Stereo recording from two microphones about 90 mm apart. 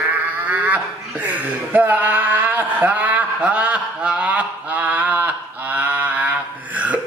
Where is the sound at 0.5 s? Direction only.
15° right (ahead or behind).